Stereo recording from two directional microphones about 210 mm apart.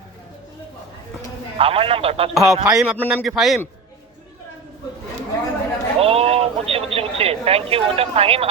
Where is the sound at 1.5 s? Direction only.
25° right (ahead or behind).